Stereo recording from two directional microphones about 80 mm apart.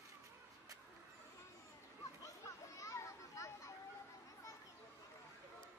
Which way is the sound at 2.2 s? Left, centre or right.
Left.